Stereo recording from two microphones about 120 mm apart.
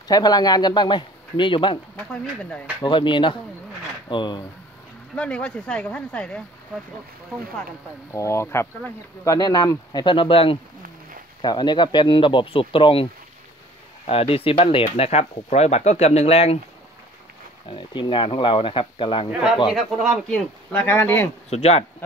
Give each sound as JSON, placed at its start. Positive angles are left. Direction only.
{"t": 0.1, "sound": "speech", "side_deg": 35}
{"t": 2.8, "sound": "speech", "side_deg": 40}
{"t": 5.1, "sound": "speech", "side_deg": 10}
{"t": 8.1, "sound": "speech", "side_deg": 25}
{"t": 11.4, "sound": "speech", "side_deg": 35}
{"t": 17.6, "sound": "speech", "side_deg": 40}
{"t": 19.7, "sound": "speech", "side_deg": 0}
{"t": 21.5, "sound": "speech", "side_deg": 55}